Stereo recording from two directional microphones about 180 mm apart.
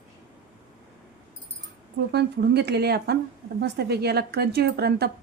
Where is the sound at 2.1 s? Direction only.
65° right (ahead or behind).